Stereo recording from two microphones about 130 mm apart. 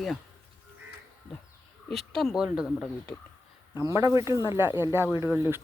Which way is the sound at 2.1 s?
5° right (ahead or behind).